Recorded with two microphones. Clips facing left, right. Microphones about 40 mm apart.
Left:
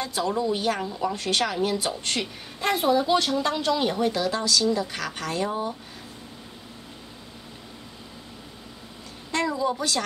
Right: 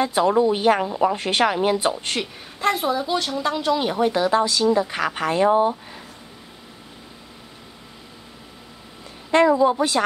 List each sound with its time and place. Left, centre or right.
0.0 s a woman's voice: right
2.6 s a woman's voice: centre; by 5.8 s right
9.3 s a woman's voice: right